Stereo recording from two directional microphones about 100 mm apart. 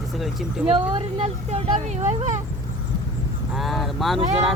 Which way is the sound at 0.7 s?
65° right (ahead or behind).